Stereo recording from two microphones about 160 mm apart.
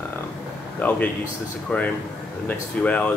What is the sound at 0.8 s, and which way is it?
Speech, 10° left (ahead or behind).